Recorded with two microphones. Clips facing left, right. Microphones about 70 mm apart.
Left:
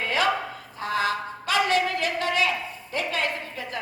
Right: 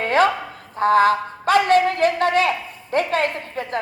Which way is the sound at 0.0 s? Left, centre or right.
Right.